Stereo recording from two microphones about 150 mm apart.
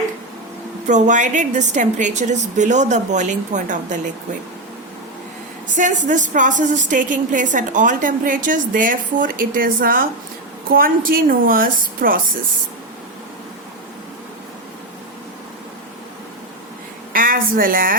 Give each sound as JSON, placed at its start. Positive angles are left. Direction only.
{"t": 0.9, "sound": "a woman's voice", "side_deg": -55}
{"t": 5.7, "sound": "a woman's voice", "side_deg": -55}
{"t": 17.1, "sound": "a sound", "side_deg": -70}